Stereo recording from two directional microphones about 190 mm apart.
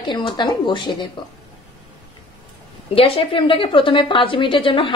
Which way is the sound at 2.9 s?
30° left (ahead or behind).